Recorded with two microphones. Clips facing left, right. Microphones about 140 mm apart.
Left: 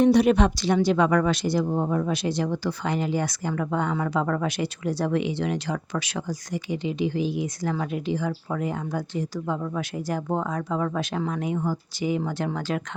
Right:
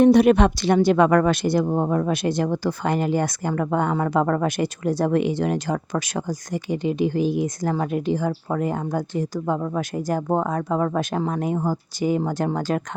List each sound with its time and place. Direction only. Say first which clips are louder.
0.0 s speech: right 4 dB; 55° right (ahead or behind)